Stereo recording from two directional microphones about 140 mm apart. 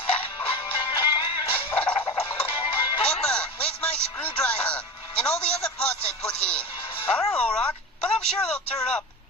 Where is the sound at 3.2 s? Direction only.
5° left (ahead or behind).